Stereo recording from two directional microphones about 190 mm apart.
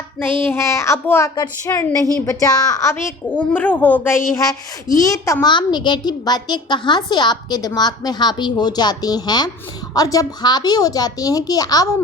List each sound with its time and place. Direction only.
0.2 s a woman's voice: 10° left (ahead or behind)